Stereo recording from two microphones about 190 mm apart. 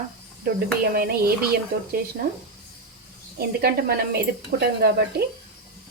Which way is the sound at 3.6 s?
55° right (ahead or behind).